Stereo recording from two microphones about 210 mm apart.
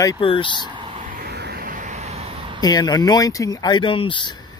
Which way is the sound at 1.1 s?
50° right (ahead or behind).